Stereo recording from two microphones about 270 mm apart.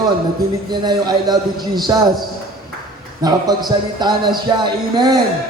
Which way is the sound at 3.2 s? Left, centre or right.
Centre.